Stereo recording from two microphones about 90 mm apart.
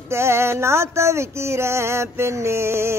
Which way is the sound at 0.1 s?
30° right (ahead or behind).